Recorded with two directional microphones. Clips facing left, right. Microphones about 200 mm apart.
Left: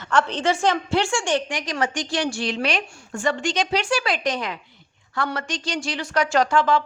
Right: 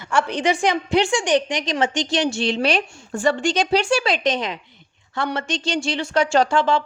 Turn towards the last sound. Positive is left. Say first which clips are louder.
# right 1 dB
turn(degrees=-25)  # may be behind; listen again after turning